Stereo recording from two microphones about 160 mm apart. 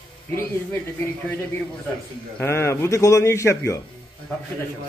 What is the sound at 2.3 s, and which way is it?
A man's voice, 15° left (ahead or behind).